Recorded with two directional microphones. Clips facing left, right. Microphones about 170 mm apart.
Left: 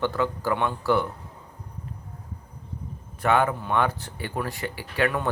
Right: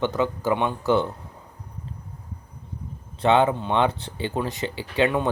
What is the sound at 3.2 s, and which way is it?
Speech, 25° right (ahead or behind).